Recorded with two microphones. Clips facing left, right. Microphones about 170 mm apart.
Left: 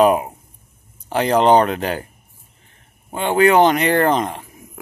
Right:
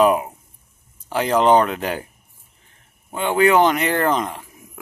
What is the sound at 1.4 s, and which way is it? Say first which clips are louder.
Speech: left 1 dB; 35° left (ahead or behind).